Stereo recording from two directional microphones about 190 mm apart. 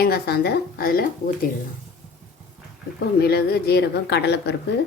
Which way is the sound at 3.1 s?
55° left (ahead or behind).